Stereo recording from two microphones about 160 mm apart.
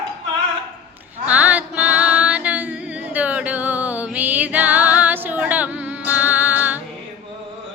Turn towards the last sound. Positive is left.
turn(degrees=-10)  # may be behind; listen again after turning